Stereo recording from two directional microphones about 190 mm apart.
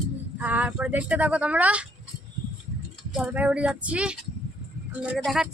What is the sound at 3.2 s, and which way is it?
Speech, 5° right (ahead or behind).